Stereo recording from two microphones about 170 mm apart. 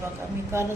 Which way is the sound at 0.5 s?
15° right (ahead or behind).